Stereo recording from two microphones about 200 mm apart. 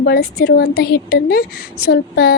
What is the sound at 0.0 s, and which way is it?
Speech, 50° left (ahead or behind).